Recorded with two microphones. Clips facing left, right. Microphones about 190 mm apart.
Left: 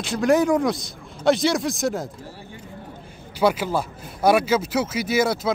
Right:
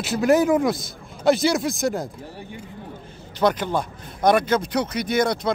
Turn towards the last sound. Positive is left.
turn(degrees=5)  # may be behind; listen again after turning